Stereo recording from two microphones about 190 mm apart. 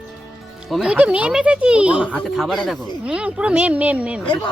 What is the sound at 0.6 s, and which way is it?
Speech, 5° right (ahead or behind).